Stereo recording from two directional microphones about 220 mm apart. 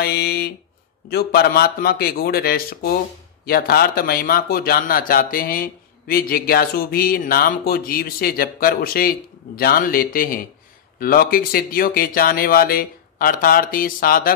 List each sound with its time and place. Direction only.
0.0 s speech: 45° left (ahead or behind)